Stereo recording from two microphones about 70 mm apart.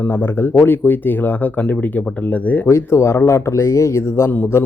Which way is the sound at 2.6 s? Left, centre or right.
Left.